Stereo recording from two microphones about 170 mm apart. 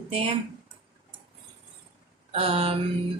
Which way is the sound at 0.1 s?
35° right (ahead or behind).